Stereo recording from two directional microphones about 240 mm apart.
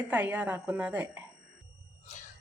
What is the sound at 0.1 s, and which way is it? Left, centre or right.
A woman's voice, centre.